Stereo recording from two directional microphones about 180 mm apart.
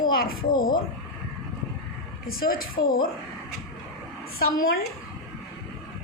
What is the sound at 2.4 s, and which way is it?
Speech, 55° left (ahead or behind).